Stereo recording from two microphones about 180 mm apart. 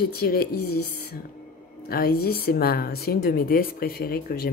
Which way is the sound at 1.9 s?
60° left (ahead or behind).